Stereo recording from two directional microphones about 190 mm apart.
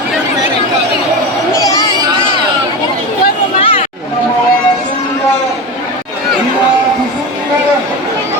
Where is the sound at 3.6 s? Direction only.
30° left (ahead or behind).